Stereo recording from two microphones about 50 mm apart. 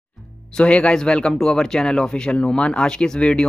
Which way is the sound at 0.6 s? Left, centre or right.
Left.